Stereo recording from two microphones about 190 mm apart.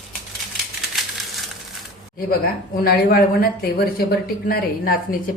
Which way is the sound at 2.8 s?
55° left (ahead or behind).